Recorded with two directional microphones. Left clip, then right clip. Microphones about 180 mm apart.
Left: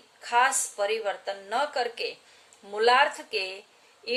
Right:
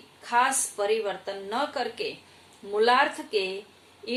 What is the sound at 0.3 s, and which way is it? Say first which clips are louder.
Speech: even; 30° left (ahead or behind).